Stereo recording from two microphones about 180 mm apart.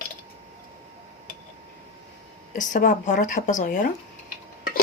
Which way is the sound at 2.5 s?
45° left (ahead or behind).